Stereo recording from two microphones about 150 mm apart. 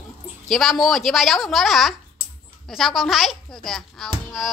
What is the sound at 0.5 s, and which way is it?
Speech, centre (ahead or behind).